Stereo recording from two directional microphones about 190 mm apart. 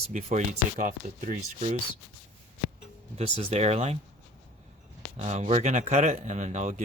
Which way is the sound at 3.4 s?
35° right (ahead or behind).